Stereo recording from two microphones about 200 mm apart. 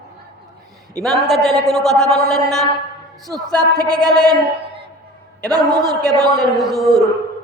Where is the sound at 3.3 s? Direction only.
5° left (ahead or behind).